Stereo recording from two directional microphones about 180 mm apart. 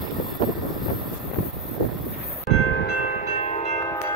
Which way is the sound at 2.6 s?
65° left (ahead or behind).